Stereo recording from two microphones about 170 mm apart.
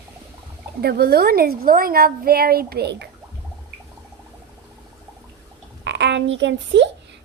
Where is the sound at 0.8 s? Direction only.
70° right (ahead or behind).